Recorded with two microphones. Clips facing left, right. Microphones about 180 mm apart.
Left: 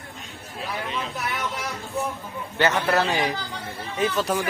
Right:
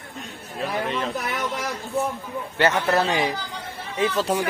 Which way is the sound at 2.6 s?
25° right (ahead or behind).